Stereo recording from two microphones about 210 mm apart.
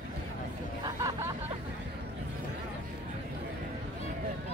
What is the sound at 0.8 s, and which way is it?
Vehicle, 15° right (ahead or behind).